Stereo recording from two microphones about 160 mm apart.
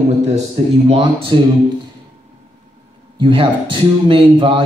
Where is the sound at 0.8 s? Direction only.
35° right (ahead or behind).